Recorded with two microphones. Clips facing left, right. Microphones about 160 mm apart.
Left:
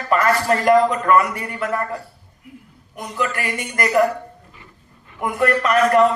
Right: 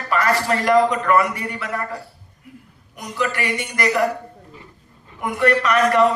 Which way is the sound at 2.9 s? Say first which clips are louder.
Even; 45° left (ahead or behind).